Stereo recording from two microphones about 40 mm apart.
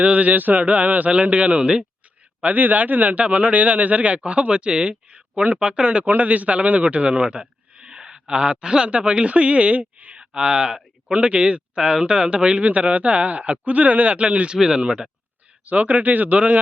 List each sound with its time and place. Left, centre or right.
0.0 s speech: right
2.4 s speech: right
6.1 s a man's voice: right
10.2 s speech: right
15.6 s speech: right